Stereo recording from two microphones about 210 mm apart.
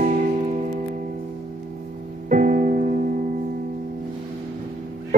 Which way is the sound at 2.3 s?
40° right (ahead or behind).